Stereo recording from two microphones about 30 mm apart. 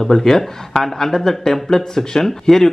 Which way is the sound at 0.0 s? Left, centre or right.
Centre.